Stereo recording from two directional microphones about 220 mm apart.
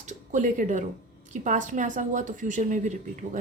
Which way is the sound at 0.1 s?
35° right (ahead or behind).